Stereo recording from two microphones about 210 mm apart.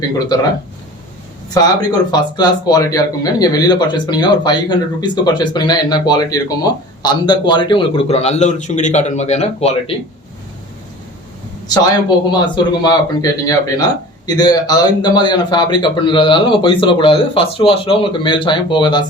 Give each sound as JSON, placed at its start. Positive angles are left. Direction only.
{"t": 1.5, "sound": "speech", "side_deg": 20}
{"t": 11.7, "sound": "speech", "side_deg": 20}